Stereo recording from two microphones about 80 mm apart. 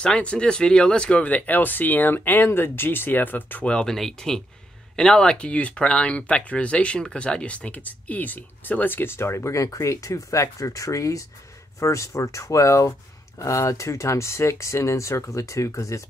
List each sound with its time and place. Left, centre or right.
0.0 s speech: centre
3.7 s speech: centre; by 16.0 s left